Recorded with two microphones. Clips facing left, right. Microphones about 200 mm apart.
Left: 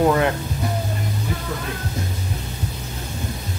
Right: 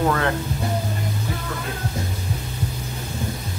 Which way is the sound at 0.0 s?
15° left (ahead or behind).